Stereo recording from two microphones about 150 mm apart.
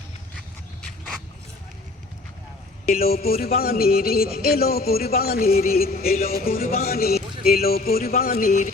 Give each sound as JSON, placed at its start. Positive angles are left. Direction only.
{"t": 0.8, "sound": "dog", "side_deg": 0}
{"t": 3.0, "sound": "a man's voice", "side_deg": 90}
{"t": 6.8, "sound": "a man's voice", "side_deg": 90}